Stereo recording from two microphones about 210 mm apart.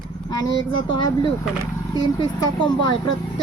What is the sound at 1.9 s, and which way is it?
Speech, 20° left (ahead or behind).